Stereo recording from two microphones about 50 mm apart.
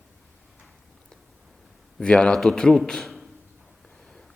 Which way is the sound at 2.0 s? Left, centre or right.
Left.